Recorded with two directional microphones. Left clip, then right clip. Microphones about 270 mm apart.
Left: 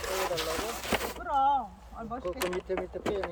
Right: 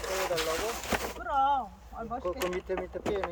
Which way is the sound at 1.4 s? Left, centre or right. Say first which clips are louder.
Left 1 dB; centre.